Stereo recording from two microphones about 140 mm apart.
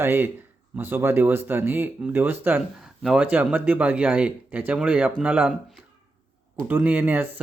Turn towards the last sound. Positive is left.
turn(degrees=-15)  # may be behind; listen again after turning